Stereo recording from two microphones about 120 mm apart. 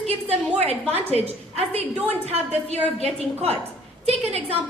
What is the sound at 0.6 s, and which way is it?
A woman's voice, 60° right (ahead or behind).